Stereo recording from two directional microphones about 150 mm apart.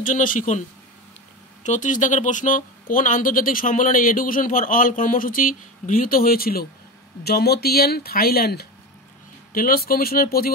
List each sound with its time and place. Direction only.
0.0 s speech: 60° left (ahead or behind); by 8.6 s 90° left
9.5 s speech: 75° left (ahead or behind)